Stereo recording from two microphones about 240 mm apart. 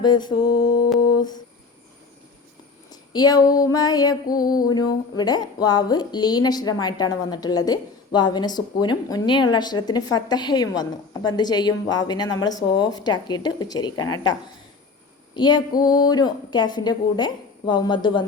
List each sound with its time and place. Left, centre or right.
0.0 s female singing: centre
2.9 s female singing: centre
15.4 s female singing: centre